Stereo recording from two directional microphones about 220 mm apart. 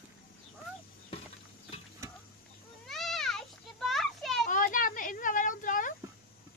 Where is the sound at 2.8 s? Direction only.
Centre (ahead or behind).